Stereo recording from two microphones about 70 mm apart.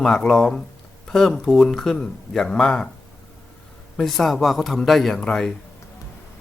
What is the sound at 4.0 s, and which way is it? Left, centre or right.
Speech, centre.